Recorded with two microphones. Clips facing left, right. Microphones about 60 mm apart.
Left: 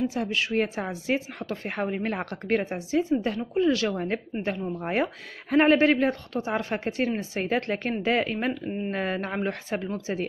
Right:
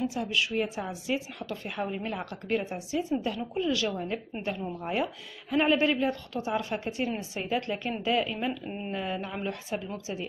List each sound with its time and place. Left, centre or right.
0.1 s a woman's voice: left
8.6 s speech: centre
8.9 s speech: left